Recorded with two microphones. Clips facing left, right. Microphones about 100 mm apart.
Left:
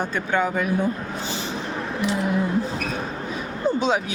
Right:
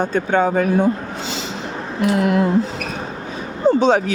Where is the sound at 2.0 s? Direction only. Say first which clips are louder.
Right 7 dB; 85° right.